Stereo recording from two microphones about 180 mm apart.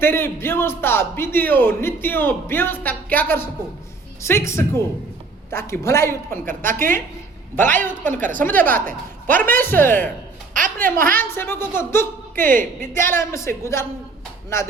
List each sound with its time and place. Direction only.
0.0 s a man's voice: 15° left (ahead or behind)
5.8 s a man's voice: 15° left (ahead or behind)
6.4 s a woman's voice: 50° right (ahead or behind)
7.5 s a man's voice: 10° left (ahead or behind)
8.2 s a woman's voice: 45° right (ahead or behind)
8.4 s a man's voice: 10° left (ahead or behind)
8.9 s a woman's voice: 50° right (ahead or behind)
9.4 s a man's voice: 10° left (ahead or behind)
10.5 s a woman's voice: 50° right (ahead or behind)
11.2 s a man's voice: 10° left (ahead or behind)